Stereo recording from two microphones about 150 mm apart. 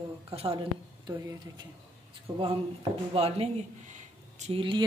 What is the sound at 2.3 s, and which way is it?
Speech, 25° right (ahead or behind).